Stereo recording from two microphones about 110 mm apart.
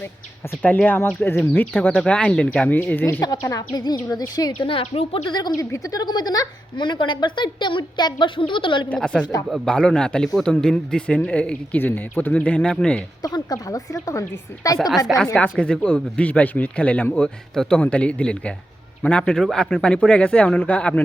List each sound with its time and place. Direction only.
0.6 s speech: 15° left (ahead or behind)
3.4 s a woman's voice: 40° left (ahead or behind)
4.5 s a woman's voice: 55° left (ahead or behind)
9.0 s speech: 10° left (ahead or behind)
13.2 s a woman's voice: 35° left (ahead or behind)
14.8 s a woman's voice: centre (ahead or behind)
15.4 s speech: 10° left (ahead or behind)